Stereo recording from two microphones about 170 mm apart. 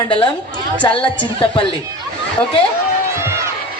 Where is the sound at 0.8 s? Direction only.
30° left (ahead or behind).